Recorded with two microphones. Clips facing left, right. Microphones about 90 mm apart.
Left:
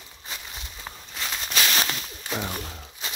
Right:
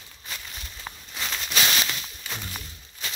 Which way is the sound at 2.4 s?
65° left (ahead or behind).